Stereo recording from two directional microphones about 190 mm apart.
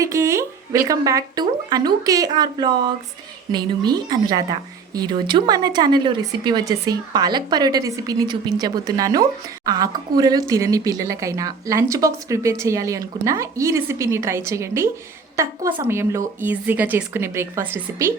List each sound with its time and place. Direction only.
0.0 s a woman's voice: 15° right (ahead or behind)